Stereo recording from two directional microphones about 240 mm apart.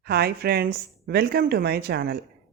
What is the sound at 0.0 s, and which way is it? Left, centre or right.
A woman's voice, right.